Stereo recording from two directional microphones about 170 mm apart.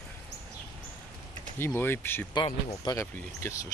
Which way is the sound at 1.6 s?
15° left (ahead or behind).